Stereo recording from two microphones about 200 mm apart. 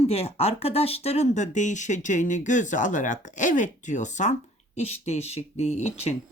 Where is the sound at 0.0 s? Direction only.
30° left (ahead or behind).